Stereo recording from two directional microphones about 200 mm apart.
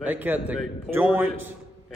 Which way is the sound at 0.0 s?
10° right (ahead or behind).